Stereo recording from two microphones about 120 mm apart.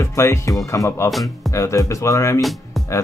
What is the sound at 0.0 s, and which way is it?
Speech, 25° left (ahead or behind).